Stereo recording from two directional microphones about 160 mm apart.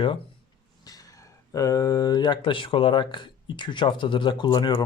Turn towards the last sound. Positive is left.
turn(degrees=25)  # may be behind; listen again after turning